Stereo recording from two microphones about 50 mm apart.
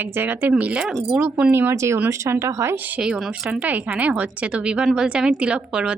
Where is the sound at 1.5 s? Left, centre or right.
Right.